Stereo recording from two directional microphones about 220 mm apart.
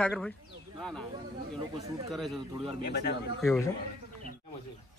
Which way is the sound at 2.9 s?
45° left (ahead or behind).